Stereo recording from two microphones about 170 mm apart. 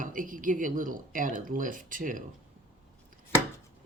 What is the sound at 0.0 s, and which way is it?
Speech, 55° right (ahead or behind).